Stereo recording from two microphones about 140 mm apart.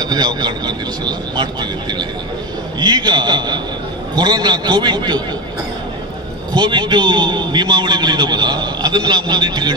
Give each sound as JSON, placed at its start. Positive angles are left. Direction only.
{"t": 0.0, "sound": "a man's voice", "side_deg": -30}
{"t": 6.5, "sound": "a man's voice", "side_deg": -30}